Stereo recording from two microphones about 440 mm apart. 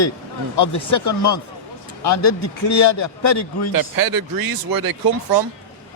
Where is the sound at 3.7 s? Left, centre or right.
Right.